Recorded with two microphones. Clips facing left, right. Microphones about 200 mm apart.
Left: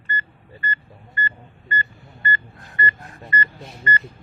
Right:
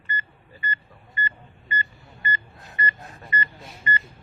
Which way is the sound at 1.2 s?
15° right (ahead or behind).